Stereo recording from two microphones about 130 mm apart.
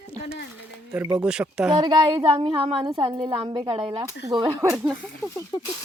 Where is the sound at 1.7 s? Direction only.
35° right (ahead or behind).